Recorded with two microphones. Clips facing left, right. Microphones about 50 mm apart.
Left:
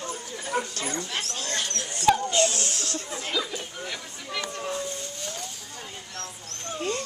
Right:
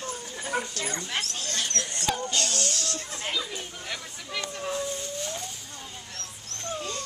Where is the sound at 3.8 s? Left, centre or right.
Centre.